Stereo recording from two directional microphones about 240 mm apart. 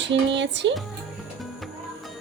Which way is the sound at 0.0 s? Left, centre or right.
Right.